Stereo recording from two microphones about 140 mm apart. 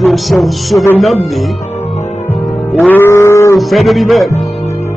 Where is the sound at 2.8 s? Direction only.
15° left (ahead or behind).